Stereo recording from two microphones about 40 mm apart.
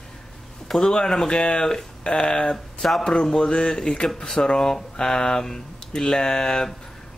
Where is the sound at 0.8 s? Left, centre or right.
Centre.